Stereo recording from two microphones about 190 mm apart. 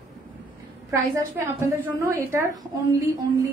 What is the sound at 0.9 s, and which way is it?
A woman's voice, 15° right (ahead or behind).